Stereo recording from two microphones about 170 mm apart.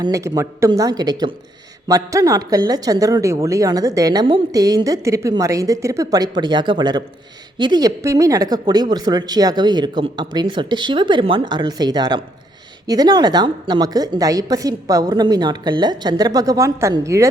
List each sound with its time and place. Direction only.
0.0 s speech: 20° right (ahead or behind)